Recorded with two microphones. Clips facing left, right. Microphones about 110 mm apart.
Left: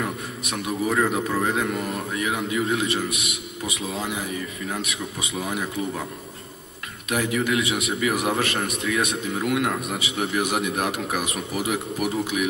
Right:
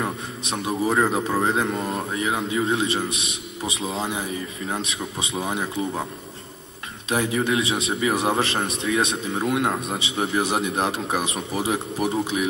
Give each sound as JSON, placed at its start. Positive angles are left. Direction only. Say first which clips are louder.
{"t": 0.0, "sound": "a man's voice", "louder": "right 1 dB", "side_deg": -30}
{"t": 7.1, "sound": "a man's voice", "louder": "right 1 dB", "side_deg": -30}